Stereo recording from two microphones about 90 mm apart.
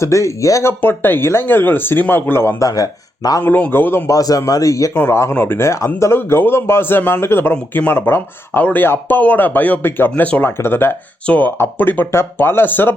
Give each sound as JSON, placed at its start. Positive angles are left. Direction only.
{"t": 0.0, "sound": "speech", "side_deg": 35}
{"t": 2.6, "sound": "speech", "side_deg": 40}
{"t": 3.4, "sound": "speech", "side_deg": 20}
{"t": 4.2, "sound": "speech", "side_deg": 40}
{"t": 10.4, "sound": "speech", "side_deg": 25}